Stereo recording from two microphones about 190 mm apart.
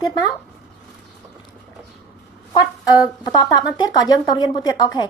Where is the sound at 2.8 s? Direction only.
20° left (ahead or behind).